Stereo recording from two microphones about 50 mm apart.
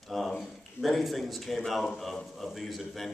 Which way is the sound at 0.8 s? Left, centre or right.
Centre.